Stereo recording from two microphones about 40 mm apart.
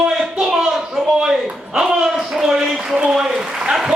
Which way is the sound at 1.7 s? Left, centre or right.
Centre.